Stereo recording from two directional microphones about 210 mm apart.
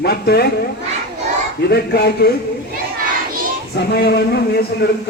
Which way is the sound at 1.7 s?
50° left (ahead or behind).